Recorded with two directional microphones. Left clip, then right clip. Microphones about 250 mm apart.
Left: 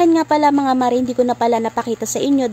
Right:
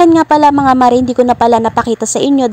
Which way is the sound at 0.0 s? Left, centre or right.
Centre.